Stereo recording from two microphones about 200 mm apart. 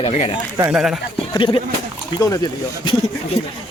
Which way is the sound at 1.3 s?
25° left (ahead or behind).